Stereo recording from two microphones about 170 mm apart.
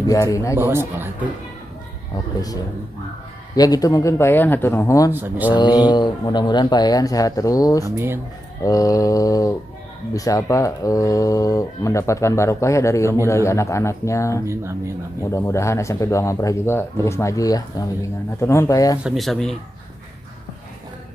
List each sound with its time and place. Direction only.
0.0 s speech: 20° left (ahead or behind)
0.9 s speech: 10° right (ahead or behind)
2.1 s speech: 20° left (ahead or behind)
5.1 s speech: 10° right (ahead or behind)
5.5 s speech: 25° left (ahead or behind)
7.8 s speech: 15° right (ahead or behind)
8.6 s speech: 20° left (ahead or behind)
14.4 s speech: 15° right (ahead or behind)
15.3 s speech: 15° left (ahead or behind)
19.0 s speech: centre (ahead or behind)